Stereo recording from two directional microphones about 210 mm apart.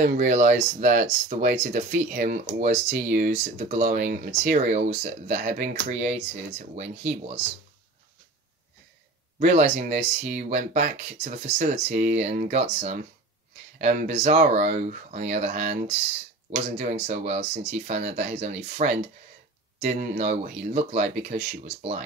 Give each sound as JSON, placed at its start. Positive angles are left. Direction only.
{"t": 0.0, "sound": "speech", "side_deg": -35}
{"t": 9.4, "sound": "speech", "side_deg": -35}